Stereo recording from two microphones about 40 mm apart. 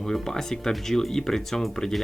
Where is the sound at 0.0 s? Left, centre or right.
Centre.